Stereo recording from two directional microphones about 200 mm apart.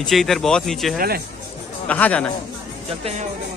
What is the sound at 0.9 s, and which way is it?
Speech, 50° right (ahead or behind).